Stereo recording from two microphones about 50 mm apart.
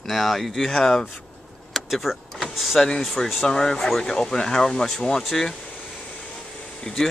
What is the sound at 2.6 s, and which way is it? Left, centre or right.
Speech, centre.